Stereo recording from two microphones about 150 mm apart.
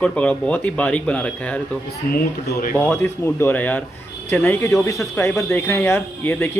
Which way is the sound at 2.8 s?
15° left (ahead or behind).